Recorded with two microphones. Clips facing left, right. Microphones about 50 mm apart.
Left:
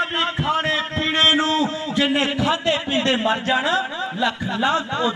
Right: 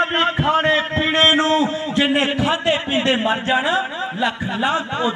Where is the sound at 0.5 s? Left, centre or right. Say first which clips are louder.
Right 5 dB; centre.